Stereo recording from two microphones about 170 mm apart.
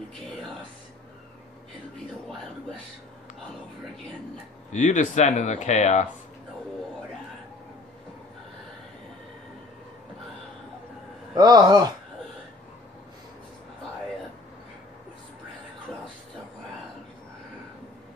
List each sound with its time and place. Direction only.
4.7 s speech: 45° left (ahead or behind)
11.3 s speech: 25° right (ahead or behind)